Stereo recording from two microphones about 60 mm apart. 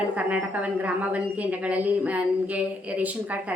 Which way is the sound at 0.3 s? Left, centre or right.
Right.